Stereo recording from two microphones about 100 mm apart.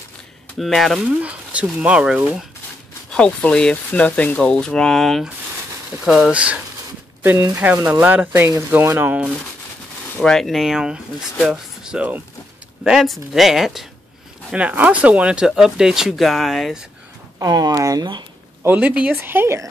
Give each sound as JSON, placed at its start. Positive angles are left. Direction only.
{"t": 0.6, "sound": "speech", "side_deg": 0}
{"t": 1.0, "sound": "speech", "side_deg": -15}
{"t": 3.1, "sound": "speech", "side_deg": 10}
{"t": 8.5, "sound": "speech", "side_deg": -30}
{"t": 10.2, "sound": "speech", "side_deg": 5}
{"t": 14.5, "sound": "speech", "side_deg": -15}
{"t": 17.4, "sound": "speech", "side_deg": -40}
{"t": 18.6, "sound": "speech", "side_deg": -20}